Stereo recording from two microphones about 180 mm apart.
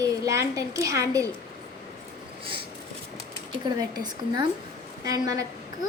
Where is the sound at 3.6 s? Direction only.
25° right (ahead or behind).